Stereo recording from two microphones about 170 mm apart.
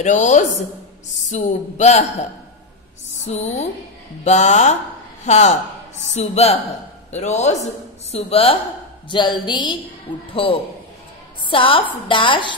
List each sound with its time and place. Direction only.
0.0 s a man's voice: 45° left (ahead or behind)
3.3 s a woman's voice: 40° left (ahead or behind)